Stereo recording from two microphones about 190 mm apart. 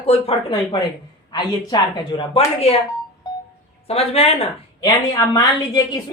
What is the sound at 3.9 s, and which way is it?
Speech, 30° left (ahead or behind).